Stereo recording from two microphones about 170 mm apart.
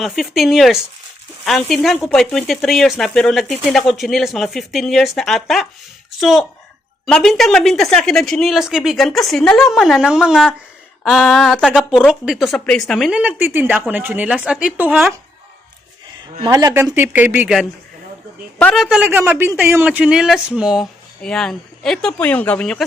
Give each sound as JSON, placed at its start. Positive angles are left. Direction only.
{"t": 0.0, "sound": "speech", "side_deg": 0}
{"t": 16.4, "sound": "a woman's voice", "side_deg": -25}
{"t": 18.6, "sound": "speech", "side_deg": 0}